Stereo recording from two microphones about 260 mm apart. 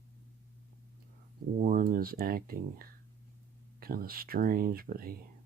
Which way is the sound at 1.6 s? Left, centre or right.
Right.